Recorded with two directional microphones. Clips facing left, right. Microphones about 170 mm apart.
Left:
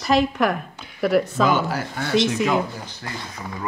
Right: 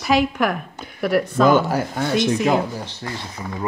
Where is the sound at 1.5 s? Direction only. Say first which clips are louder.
Right 5 dB; 45° right (ahead or behind).